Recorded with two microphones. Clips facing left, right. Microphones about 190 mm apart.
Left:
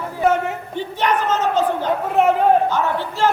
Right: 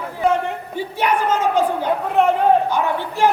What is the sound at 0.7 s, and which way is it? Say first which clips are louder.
A woman's voice: even; 10° right (ahead or behind).